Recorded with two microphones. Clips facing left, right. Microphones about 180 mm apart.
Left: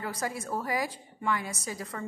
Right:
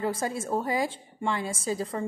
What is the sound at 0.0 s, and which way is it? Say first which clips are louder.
A woman's voice: right 5 dB; 25° right (ahead or behind).